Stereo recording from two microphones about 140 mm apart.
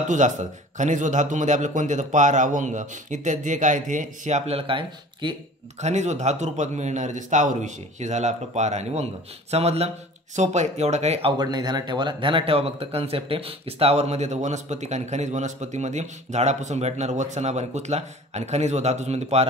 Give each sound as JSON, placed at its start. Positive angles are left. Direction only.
{"t": 0.1, "sound": "a man's voice", "side_deg": -60}
{"t": 5.8, "sound": "a man's voice", "side_deg": -55}
{"t": 11.3, "sound": "a man's voice", "side_deg": -30}